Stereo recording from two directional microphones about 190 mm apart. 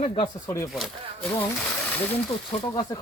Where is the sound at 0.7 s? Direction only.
Centre (ahead or behind).